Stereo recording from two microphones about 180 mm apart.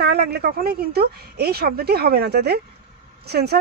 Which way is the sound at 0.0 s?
65° right (ahead or behind).